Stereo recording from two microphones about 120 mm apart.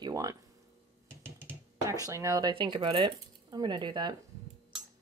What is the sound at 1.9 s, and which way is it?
Speech, 30° right (ahead or behind).